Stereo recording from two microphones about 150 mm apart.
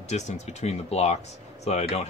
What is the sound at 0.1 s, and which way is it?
A man's voice, 50° left (ahead or behind).